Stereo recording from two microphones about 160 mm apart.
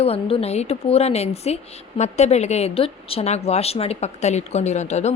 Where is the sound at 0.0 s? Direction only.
40° left (ahead or behind).